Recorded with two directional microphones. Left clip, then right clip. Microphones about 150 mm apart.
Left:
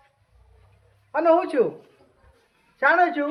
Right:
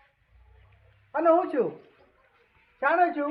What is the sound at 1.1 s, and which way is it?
Speech, 25° left (ahead or behind).